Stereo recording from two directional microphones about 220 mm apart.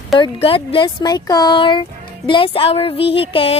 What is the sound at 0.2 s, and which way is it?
Speech, 25° left (ahead or behind).